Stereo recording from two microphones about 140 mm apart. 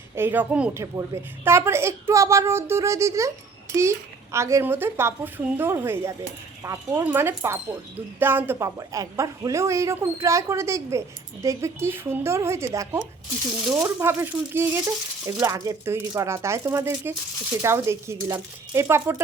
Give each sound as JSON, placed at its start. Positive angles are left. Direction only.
{"t": 0.2, "sound": "a woman's voice", "side_deg": -15}